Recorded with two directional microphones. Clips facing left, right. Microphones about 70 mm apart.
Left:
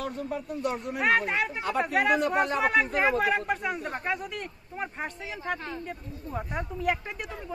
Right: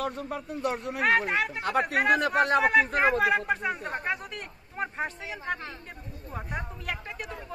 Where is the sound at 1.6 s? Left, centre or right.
Right.